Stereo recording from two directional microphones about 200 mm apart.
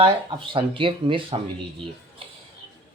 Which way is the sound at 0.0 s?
25° right (ahead or behind).